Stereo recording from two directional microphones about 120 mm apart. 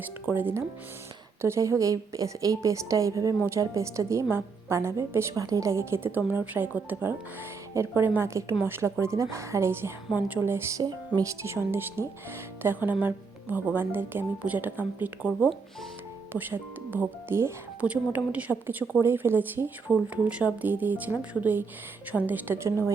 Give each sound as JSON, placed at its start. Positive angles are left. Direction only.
{"t": 0.3, "sound": "a woman's voice", "side_deg": -15}
{"t": 16.3, "sound": "a woman's voice", "side_deg": -15}